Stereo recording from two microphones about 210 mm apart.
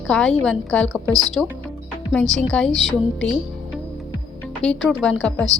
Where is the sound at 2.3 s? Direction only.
Centre (ahead or behind).